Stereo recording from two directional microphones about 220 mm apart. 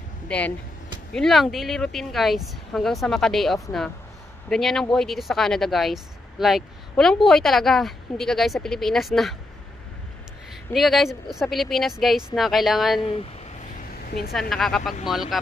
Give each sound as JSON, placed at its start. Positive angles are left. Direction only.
{"t": 0.3, "sound": "a woman's voice", "side_deg": 5}
{"t": 10.7, "sound": "a woman's voice", "side_deg": 0}
{"t": 13.0, "sound": "a sound", "side_deg": 25}
{"t": 14.0, "sound": "a woman's voice", "side_deg": 45}
{"t": 14.5, "sound": "a woman's voice", "side_deg": 0}